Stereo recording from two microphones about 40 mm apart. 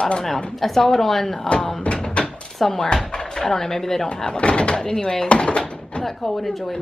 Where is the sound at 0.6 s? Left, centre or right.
Centre.